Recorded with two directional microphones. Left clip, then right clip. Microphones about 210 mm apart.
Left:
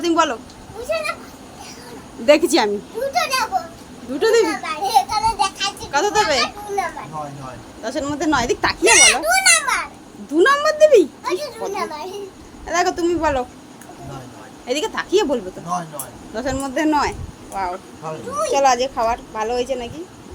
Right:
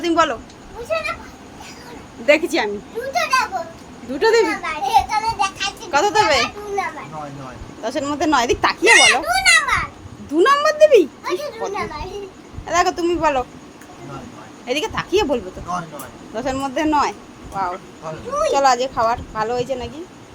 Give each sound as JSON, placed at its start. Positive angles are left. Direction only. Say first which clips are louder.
{"t": 0.0, "sound": "a child's voice", "louder": "even", "side_deg": 5}
{"t": 2.2, "sound": "speech", "louder": "left 2 dB", "side_deg": 20}
{"t": 3.1, "sound": "a child's voice", "louder": "right 1 dB", "side_deg": 5}
{"t": 6.8, "sound": "speech", "louder": "left 1 dB", "side_deg": 10}
{"t": 7.8, "sound": "a child's voice", "louder": "right 2 dB", "side_deg": 0}
{"t": 8.9, "sound": "a child's voice", "louder": "right 1 dB", "side_deg": 15}
{"t": 14.7, "sound": "a child's voice", "louder": "left 1 dB", "side_deg": 5}